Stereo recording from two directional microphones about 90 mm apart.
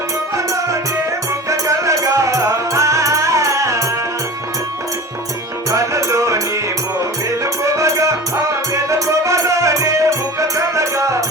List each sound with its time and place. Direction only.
1.5 s music: 35° right (ahead or behind)
5.7 s music: 35° right (ahead or behind)